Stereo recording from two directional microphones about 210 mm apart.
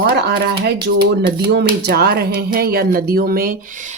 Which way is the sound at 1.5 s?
50° right (ahead or behind).